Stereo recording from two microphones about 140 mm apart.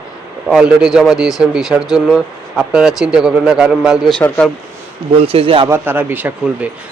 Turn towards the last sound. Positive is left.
turn(degrees=-10)  # may be behind; listen again after turning